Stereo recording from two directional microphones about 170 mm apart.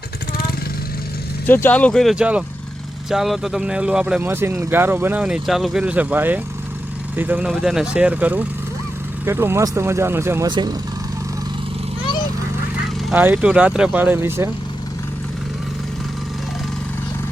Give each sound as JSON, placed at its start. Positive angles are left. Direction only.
{"t": 1.5, "sound": "speech", "side_deg": 10}
{"t": 10.5, "sound": "speech", "side_deg": -25}
{"t": 13.1, "sound": "speech", "side_deg": -10}